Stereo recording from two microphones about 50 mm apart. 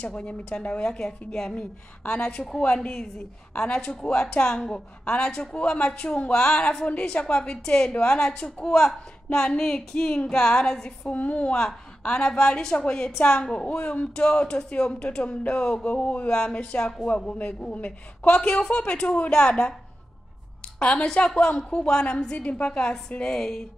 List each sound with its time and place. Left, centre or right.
0.0 s a woman's voice: left
1.5 s a woman's voice: left
11.1 s a woman's voice: left
11.5 s a woman's voice: centre